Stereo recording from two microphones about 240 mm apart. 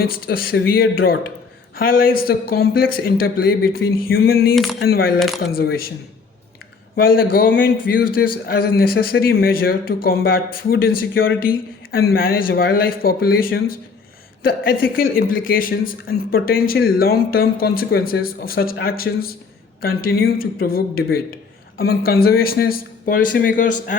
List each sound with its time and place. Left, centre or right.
0.0 s a man's voice: left
4.5 s speech: centre
4.8 s a man's voice: left
6.9 s a man's voice: left